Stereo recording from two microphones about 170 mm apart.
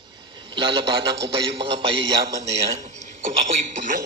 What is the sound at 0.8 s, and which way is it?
Speech, 90° right.